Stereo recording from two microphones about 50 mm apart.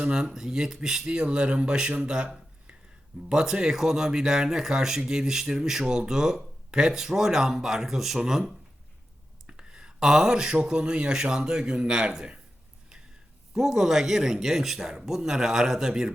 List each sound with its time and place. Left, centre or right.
0.0 s speech: centre
13.5 s speech: centre